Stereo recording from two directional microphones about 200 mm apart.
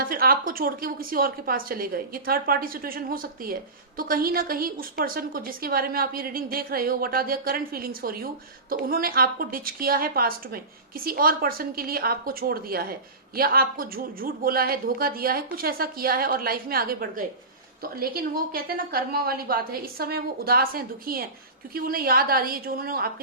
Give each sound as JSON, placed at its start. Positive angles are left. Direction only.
{"t": 0.0, "sound": "a woman's voice", "side_deg": -45}